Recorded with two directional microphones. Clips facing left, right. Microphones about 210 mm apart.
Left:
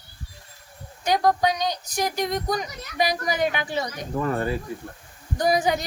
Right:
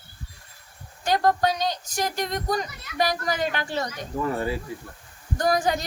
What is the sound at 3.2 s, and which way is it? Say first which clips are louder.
Speech: left 2 dB; 15° left (ahead or behind).